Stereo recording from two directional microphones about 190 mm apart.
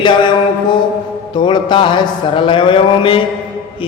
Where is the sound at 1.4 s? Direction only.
25° left (ahead or behind).